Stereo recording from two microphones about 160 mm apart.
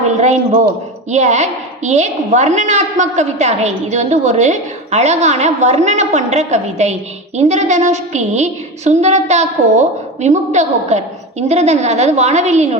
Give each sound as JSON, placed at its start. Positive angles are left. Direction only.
{"t": 0.2, "sound": "a woman's voice", "side_deg": -45}